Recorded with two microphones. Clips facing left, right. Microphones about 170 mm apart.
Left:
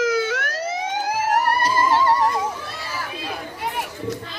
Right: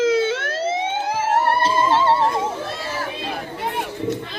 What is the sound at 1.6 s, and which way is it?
Music, 25° right (ahead or behind).